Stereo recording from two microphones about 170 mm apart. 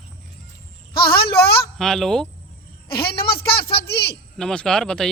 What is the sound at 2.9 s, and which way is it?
Speech, 65° left (ahead or behind).